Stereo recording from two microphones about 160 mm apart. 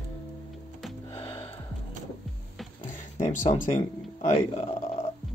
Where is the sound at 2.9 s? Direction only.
50° left (ahead or behind).